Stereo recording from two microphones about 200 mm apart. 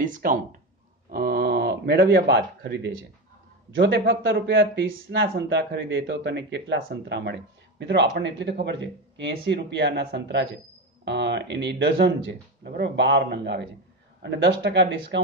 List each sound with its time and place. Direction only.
0.0 s a man's voice: 40° right (ahead or behind); by 4.8 s 70° right (ahead or behind)
5.1 s speech: 55° right (ahead or behind)